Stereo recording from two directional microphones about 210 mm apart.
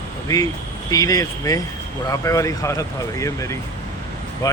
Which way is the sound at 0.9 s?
15° left (ahead or behind).